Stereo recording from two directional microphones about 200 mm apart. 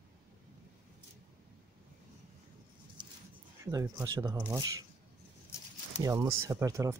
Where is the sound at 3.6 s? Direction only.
15° right (ahead or behind).